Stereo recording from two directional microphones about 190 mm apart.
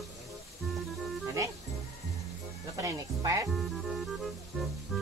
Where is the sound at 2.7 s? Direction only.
15° right (ahead or behind).